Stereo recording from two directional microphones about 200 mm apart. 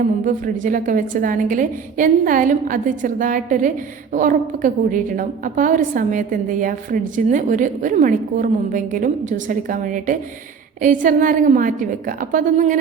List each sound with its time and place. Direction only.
0.3 s a woman's voice: 40° right (ahead or behind)